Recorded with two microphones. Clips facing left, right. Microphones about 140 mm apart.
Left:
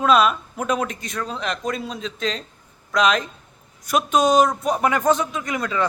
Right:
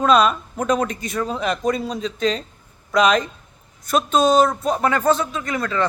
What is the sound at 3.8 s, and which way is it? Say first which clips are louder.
Speech: right 1 dB; 10° left (ahead or behind).